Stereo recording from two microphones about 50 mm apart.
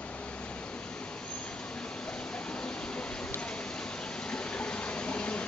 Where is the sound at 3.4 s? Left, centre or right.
Centre.